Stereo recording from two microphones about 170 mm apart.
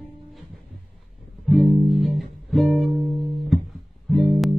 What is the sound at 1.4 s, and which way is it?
Music, centre (ahead or behind).